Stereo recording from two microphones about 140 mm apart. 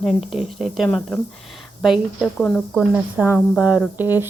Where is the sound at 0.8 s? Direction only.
5° left (ahead or behind); by 4.2 s 15° right (ahead or behind).